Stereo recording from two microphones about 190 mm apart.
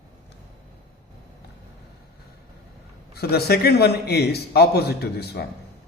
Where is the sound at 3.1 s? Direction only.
55° left (ahead or behind).